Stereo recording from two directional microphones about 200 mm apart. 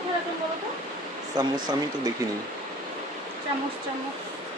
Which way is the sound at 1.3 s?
20° right (ahead or behind).